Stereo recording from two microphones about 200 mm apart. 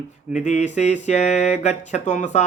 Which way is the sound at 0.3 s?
35° left (ahead or behind).